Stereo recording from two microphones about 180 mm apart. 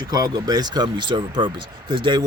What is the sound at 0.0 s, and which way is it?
Speech, 20° right (ahead or behind).